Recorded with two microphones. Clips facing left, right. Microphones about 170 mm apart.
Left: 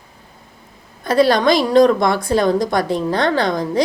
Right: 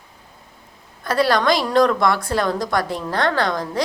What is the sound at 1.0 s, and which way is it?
A woman's voice, 20° left (ahead or behind).